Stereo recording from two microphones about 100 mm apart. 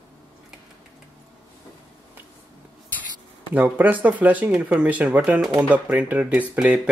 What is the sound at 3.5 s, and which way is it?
Speech, 15° right (ahead or behind).